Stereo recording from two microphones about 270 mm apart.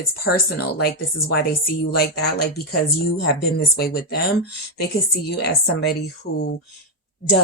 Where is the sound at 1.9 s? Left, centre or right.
Left.